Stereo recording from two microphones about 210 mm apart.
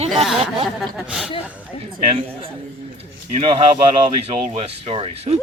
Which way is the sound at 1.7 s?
25° left (ahead or behind).